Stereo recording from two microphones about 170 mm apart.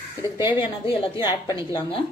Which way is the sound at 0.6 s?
30° left (ahead or behind).